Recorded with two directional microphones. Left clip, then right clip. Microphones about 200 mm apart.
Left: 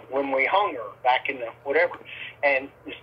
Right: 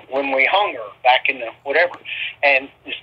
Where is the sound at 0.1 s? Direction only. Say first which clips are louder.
Right 6 dB; 30° right (ahead or behind).